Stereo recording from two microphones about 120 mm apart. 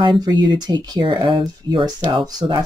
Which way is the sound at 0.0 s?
40° right (ahead or behind).